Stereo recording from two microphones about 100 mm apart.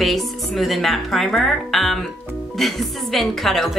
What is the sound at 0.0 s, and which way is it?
A woman's voice, centre (ahead or behind).